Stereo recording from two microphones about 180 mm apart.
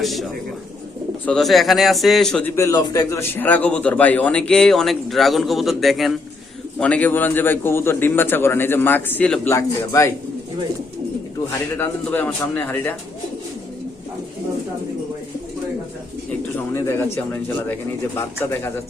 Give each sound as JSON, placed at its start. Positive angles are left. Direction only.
{"t": 0.0, "sound": "a man's voice", "side_deg": 0}
{"t": 2.6, "sound": "a man's voice", "side_deg": 15}
{"t": 11.8, "sound": "a man's voice", "side_deg": 10}
{"t": 16.7, "sound": "a man's voice", "side_deg": 15}